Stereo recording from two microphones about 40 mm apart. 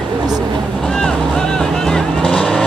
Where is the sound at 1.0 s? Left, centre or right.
Left.